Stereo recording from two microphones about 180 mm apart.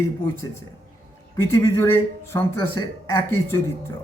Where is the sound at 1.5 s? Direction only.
15° left (ahead or behind).